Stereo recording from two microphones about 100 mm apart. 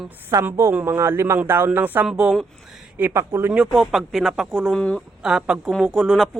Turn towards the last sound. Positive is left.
turn(degrees=0)  # may be behind; listen again after turning